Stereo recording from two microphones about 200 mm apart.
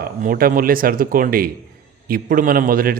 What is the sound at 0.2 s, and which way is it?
A man's voice, 45° right (ahead or behind).